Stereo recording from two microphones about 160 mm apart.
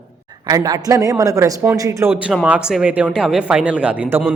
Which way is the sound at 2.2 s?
5° right (ahead or behind).